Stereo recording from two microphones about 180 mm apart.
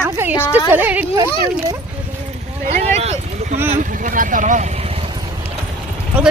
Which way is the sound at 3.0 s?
35° right (ahead or behind).